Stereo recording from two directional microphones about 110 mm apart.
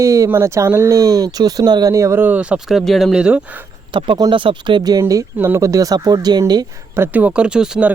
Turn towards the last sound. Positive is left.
turn(degrees=-5)  # may be behind; listen again after turning